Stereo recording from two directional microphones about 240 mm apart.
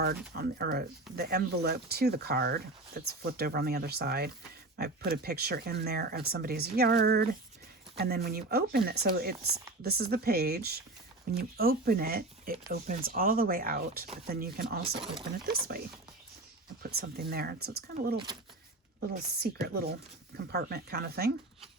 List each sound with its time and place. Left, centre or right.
0.3 s speech: right
16.8 s speech: right